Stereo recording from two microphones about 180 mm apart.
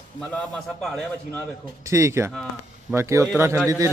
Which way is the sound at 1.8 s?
15° right (ahead or behind).